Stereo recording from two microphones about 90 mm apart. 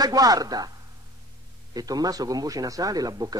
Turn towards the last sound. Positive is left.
turn(degrees=-45)  # may be behind; listen again after turning